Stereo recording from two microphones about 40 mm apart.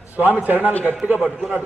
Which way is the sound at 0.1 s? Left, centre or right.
Right.